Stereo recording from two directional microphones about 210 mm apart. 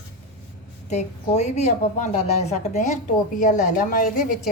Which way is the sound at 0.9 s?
35° left (ahead or behind).